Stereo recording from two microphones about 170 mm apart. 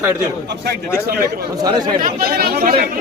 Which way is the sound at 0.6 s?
70° right (ahead or behind).